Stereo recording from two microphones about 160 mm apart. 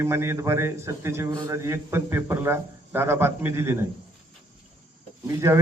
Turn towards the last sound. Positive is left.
turn(degrees=-15)  # may be behind; listen again after turning